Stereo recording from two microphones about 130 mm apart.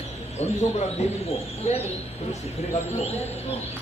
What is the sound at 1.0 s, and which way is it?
Speech, 60° left (ahead or behind).